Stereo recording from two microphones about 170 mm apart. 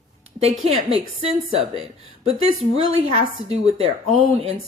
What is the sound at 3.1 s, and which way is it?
Speech, 35° right (ahead or behind).